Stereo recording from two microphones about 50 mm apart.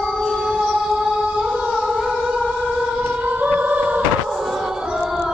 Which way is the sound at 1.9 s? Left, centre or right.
Centre.